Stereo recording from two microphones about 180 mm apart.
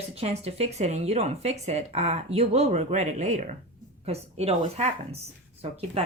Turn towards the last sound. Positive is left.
turn(degrees=-35)  # may be behind; listen again after turning